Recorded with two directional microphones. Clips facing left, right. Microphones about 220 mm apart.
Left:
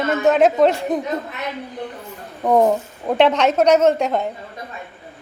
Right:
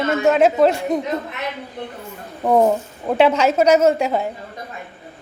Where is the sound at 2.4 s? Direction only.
5° right (ahead or behind).